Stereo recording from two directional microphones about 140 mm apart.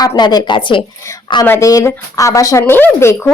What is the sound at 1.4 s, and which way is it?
Speech, 20° left (ahead or behind).